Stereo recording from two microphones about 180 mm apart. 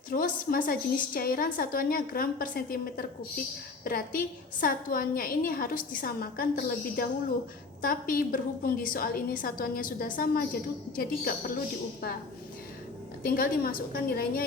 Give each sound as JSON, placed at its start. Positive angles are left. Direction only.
{"t": 0.1, "sound": "a woman's voice", "side_deg": 50}
{"t": 13.2, "sound": "a woman's voice", "side_deg": 55}